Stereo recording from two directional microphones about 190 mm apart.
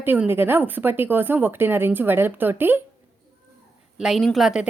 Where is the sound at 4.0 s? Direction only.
Centre (ahead or behind).